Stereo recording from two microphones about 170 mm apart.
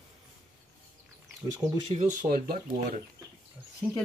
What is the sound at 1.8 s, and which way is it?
Speech, 40° right (ahead or behind).